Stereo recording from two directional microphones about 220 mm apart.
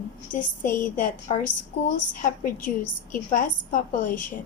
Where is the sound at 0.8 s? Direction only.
35° left (ahead or behind).